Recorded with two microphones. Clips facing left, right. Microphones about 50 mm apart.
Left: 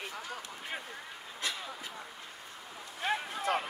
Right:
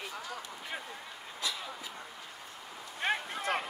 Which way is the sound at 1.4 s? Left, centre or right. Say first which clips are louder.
Even; left.